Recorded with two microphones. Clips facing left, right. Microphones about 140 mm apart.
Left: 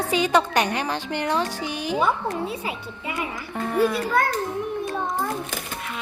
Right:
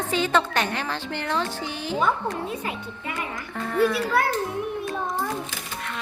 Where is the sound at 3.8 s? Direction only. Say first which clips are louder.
Even; centre (ahead or behind).